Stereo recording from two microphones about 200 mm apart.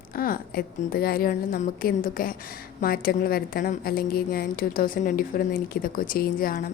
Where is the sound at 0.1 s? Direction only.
45° left (ahead or behind).